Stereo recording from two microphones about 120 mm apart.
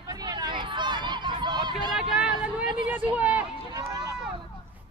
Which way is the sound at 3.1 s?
10° right (ahead or behind).